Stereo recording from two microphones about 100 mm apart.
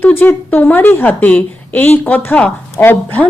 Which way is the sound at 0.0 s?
20° left (ahead or behind).